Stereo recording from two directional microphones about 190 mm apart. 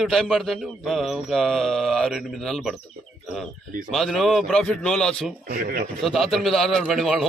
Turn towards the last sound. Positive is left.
turn(degrees=0)  # may be behind; listen again after turning